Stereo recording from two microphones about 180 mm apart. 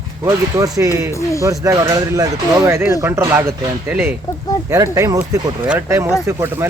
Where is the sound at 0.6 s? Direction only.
20° right (ahead or behind).